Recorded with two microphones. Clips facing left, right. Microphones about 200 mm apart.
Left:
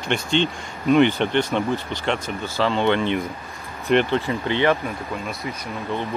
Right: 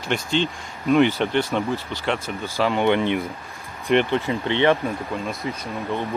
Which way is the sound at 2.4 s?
15° right (ahead or behind).